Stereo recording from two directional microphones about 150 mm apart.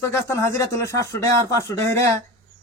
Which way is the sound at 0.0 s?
20° left (ahead or behind).